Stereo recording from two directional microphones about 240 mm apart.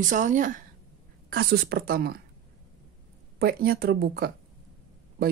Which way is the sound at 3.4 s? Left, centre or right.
Right.